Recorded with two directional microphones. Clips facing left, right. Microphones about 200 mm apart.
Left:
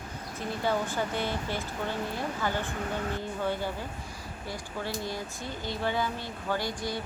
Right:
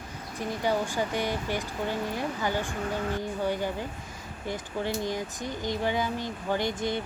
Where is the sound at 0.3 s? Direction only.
15° right (ahead or behind).